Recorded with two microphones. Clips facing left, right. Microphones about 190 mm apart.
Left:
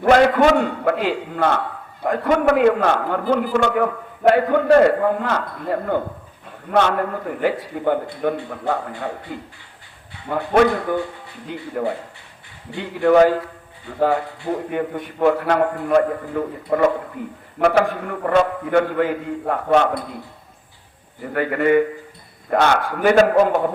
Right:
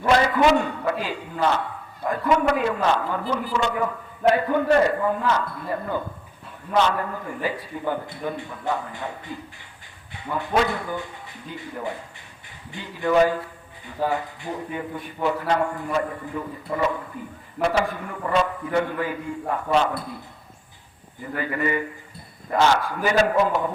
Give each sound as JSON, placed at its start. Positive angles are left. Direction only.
{"t": 0.0, "sound": "a man's voice", "side_deg": 65}
{"t": 21.3, "sound": "a man's voice", "side_deg": 65}